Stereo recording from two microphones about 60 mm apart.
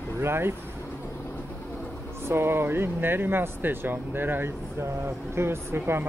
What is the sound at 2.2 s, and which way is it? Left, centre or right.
Speech, right.